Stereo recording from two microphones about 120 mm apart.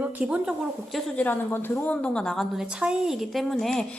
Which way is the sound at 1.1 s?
15° left (ahead or behind).